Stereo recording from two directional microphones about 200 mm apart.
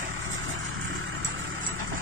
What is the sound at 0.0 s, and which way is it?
Vehicle, 90° right.